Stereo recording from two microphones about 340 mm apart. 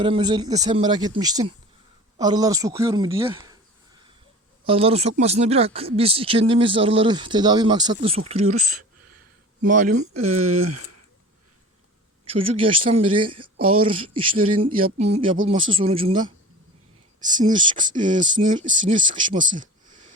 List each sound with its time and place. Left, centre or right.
0.0 s speech: centre
4.6 s speech: centre
9.6 s speech: right
10.0 s speech: right
12.2 s speech: right
12.5 s speech: centre
13.6 s speech: right
15.0 s speech: centre
18.6 s speech: right
19.1 s speech: centre